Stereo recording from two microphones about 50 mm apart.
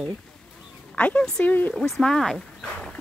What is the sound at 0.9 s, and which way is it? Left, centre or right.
Speech, left.